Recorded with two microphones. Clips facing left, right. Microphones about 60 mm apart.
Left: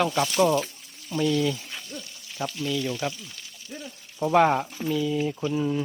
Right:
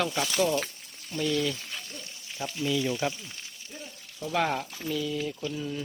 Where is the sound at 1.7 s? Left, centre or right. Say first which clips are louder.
Left 3 dB; left.